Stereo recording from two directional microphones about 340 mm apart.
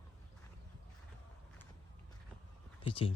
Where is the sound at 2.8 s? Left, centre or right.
Centre.